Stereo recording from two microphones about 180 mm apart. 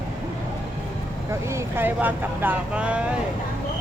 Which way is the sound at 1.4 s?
15° right (ahead or behind).